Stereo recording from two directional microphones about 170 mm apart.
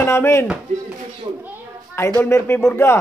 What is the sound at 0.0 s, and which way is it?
Speech, 15° left (ahead or behind).